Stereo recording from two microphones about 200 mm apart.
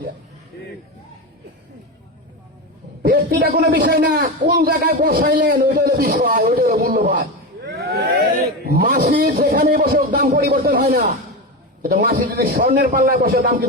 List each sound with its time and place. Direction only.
3.0 s a man's voice: 50° right (ahead or behind)
8.4 s a man's voice: 50° right (ahead or behind)